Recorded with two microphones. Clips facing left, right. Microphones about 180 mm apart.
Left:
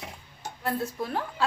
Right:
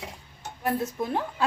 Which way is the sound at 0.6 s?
20° right (ahead or behind).